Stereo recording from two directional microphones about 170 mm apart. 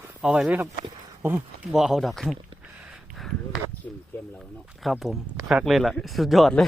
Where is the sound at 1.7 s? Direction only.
Centre (ahead or behind).